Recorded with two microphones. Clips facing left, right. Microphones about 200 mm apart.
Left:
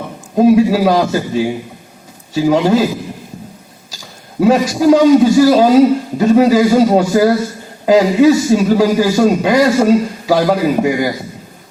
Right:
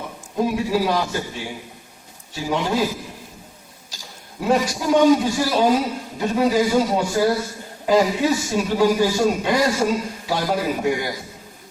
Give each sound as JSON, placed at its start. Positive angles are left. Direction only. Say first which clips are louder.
{"t": 0.3, "sound": "a man's voice", "louder": "left 11 dB", "side_deg": 90}
{"t": 4.4, "sound": "a man's voice", "louder": "left 9 dB", "side_deg": 90}